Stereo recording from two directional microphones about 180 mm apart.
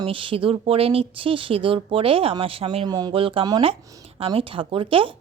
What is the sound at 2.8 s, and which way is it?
Speech, 20° right (ahead or behind).